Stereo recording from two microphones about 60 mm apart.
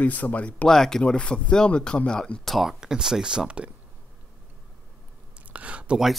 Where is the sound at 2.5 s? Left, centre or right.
Centre.